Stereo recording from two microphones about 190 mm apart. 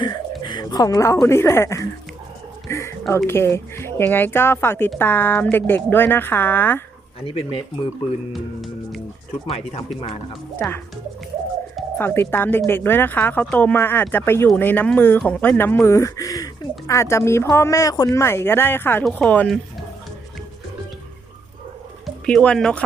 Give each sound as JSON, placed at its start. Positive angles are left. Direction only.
{"t": 0.0, "sound": "speech", "side_deg": 25}
{"t": 2.6, "sound": "a sound", "side_deg": 15}
{"t": 3.2, "sound": "speech", "side_deg": 15}
{"t": 7.3, "sound": "speech", "side_deg": 30}
{"t": 8.3, "sound": "speech", "side_deg": 0}
{"t": 9.5, "sound": "speech", "side_deg": 30}
{"t": 11.9, "sound": "a woman's voice", "side_deg": 10}
{"t": 22.0, "sound": "speech", "side_deg": 5}